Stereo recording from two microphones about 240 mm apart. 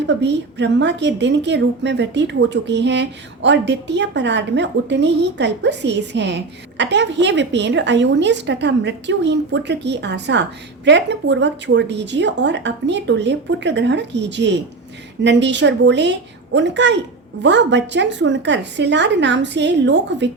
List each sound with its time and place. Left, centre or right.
0.0 s a woman's voice: right